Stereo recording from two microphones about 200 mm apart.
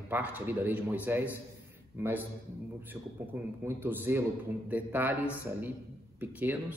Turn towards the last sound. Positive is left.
turn(degrees=-10)  # may be behind; listen again after turning